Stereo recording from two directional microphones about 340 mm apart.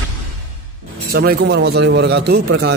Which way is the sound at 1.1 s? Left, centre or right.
Right.